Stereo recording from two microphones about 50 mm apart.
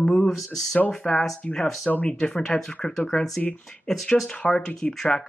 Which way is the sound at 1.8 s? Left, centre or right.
Left.